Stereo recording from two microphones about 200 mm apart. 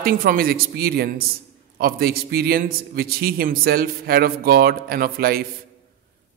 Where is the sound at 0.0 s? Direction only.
45° right (ahead or behind).